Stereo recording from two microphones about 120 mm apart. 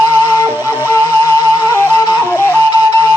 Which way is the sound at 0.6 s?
20° right (ahead or behind).